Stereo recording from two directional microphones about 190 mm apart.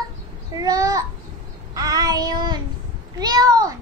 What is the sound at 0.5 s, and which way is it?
Child singing, 20° right (ahead or behind).